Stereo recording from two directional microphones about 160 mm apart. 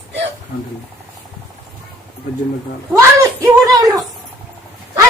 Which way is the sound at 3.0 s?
20° right (ahead or behind).